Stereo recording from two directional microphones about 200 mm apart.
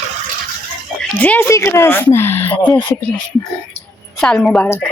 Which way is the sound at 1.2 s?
10° left (ahead or behind).